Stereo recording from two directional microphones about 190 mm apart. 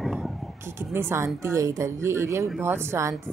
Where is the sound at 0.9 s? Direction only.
10° right (ahead or behind).